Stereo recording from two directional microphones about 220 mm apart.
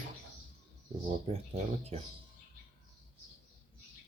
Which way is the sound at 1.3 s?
25° right (ahead or behind).